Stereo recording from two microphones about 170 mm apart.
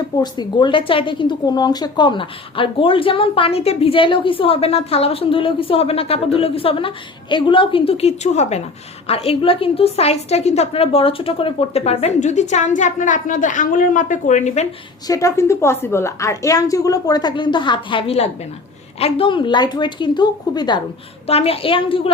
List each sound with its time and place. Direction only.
0.2 s a woman's voice: 25° left (ahead or behind); by 14.7 s 40° left (ahead or behind)
15.0 s a woman's voice: 20° left (ahead or behind)
21.2 s a woman's voice: 35° left (ahead or behind)